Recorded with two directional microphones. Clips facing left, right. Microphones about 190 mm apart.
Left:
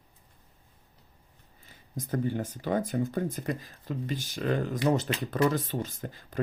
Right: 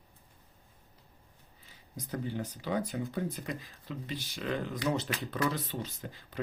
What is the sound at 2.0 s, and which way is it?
Speech, 50° left (ahead or behind).